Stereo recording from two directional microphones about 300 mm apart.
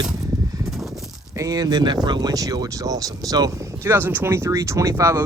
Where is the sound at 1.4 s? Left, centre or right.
Centre.